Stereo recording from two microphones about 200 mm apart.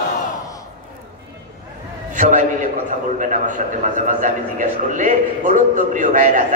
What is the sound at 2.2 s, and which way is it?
Speech, 40° right (ahead or behind).